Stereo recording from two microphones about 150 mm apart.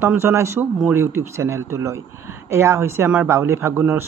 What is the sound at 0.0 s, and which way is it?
Speech, 15° right (ahead or behind).